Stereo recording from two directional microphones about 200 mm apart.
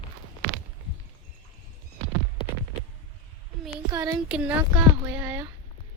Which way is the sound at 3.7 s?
10° right (ahead or behind).